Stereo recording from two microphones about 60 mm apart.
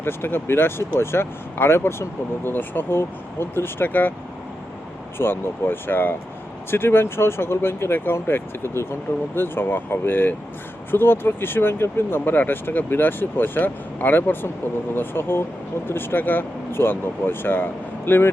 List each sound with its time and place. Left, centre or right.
0.0 s speech: left
5.1 s speech: left